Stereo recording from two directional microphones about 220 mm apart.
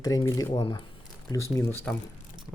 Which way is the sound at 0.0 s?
15° left (ahead or behind).